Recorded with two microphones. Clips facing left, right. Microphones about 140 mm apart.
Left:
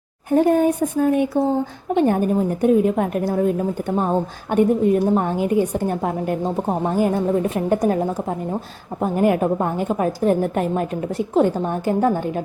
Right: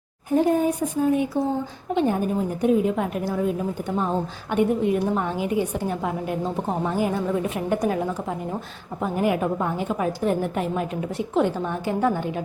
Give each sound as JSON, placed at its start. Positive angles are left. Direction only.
{"t": 0.3, "sound": "a woman's voice", "side_deg": 60}